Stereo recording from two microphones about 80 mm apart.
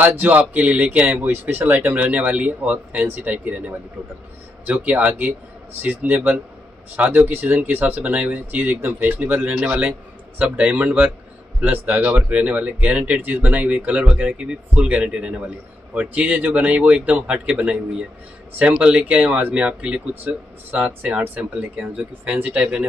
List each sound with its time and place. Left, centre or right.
0.0 s speech: right